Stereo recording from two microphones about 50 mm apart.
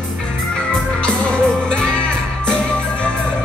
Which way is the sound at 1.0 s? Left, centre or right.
Centre.